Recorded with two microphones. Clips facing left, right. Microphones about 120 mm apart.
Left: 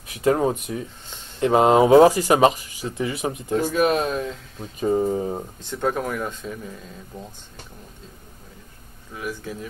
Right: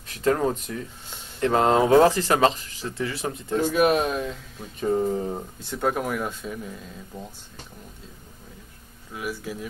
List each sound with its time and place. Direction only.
0.0 s speech: 15° left (ahead or behind)
3.7 s speech: 5° right (ahead or behind)
4.7 s speech: 10° left (ahead or behind)
5.6 s speech: 10° right (ahead or behind)
9.1 s speech: 5° right (ahead or behind)